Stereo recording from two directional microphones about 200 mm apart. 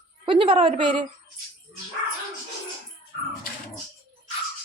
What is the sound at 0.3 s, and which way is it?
Speech, 25° right (ahead or behind).